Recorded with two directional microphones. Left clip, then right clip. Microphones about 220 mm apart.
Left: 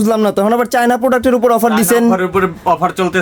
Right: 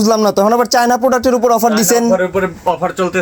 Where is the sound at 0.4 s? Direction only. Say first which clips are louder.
Right 1 dB; 5° left (ahead or behind).